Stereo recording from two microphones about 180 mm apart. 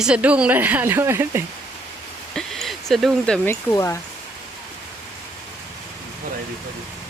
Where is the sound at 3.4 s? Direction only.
15° left (ahead or behind).